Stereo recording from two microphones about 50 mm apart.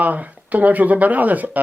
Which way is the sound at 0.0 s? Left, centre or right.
Right.